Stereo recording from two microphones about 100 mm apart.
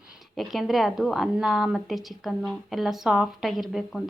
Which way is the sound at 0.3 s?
Centre (ahead or behind).